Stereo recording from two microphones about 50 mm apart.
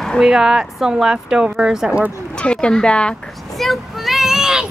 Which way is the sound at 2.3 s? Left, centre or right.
Centre.